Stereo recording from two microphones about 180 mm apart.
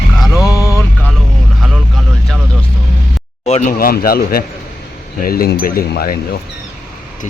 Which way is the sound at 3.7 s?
55° left (ahead or behind).